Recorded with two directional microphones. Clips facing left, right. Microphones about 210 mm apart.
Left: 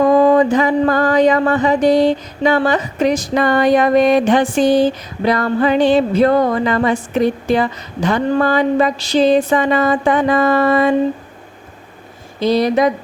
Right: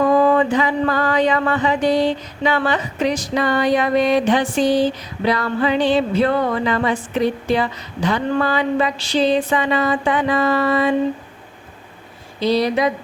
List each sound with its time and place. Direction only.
0.0 s mantra: 35° left (ahead or behind)
12.4 s mantra: 50° left (ahead or behind)